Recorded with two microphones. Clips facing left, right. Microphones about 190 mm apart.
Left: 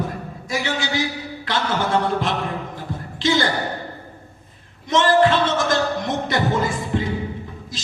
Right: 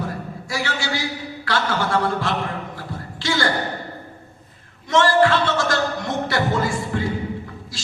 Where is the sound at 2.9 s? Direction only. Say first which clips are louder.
Left 6 dB; 20° left (ahead or behind).